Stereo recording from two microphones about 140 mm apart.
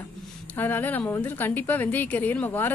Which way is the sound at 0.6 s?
15° left (ahead or behind).